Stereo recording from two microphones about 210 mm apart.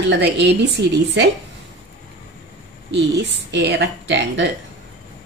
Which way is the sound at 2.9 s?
55° right (ahead or behind).